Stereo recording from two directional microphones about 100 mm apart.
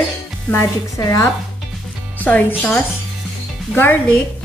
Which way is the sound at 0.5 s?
35° left (ahead or behind).